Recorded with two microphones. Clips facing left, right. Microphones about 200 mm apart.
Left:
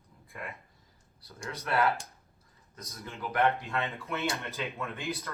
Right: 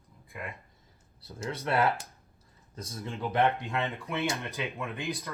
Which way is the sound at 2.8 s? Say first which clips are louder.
Right 5 dB; 30° right (ahead or behind).